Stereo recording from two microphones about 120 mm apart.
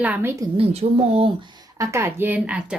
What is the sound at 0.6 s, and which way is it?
Speech, 55° right (ahead or behind).